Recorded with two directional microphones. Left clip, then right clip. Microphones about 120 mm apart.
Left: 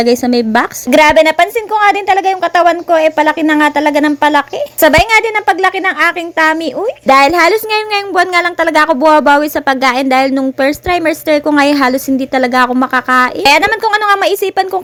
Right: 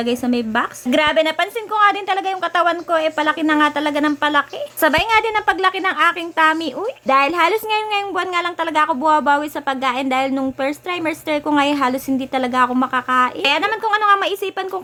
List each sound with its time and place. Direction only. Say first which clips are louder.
0.0 s a woman's voice: left 10 dB; 50° left (ahead or behind)
7.1 s a woman's voice: left 8 dB; 55° left (ahead or behind)